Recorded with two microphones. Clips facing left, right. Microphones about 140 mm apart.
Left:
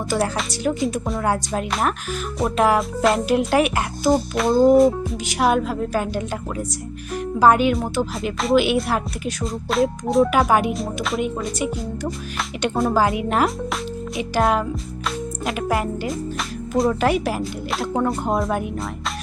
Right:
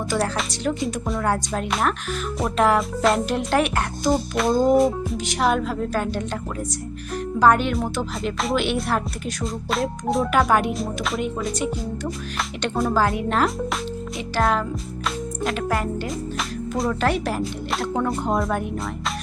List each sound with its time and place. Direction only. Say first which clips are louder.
0.1 s speech: left 3 dB; 5° left (ahead or behind)
7.3 s speech: left 2 dB; 10° left (ahead or behind)
12.6 s speech: left 3 dB; centre (ahead or behind)
12.9 s speech: even; 15° left (ahead or behind)
16.9 s speech: left 2 dB; 10° left (ahead or behind)